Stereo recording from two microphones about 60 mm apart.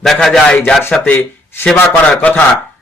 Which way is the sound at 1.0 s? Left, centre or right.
Left.